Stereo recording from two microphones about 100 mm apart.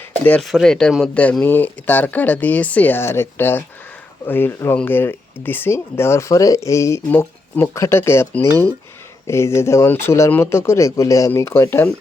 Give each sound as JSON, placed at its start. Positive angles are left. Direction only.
{"t": 0.4, "sound": "speech", "side_deg": 0}